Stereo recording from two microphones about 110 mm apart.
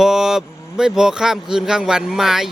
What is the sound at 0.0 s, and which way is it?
A child's voice, 5° right (ahead or behind).